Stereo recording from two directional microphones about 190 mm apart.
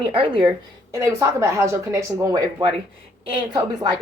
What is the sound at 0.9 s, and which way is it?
Speech, 15° right (ahead or behind).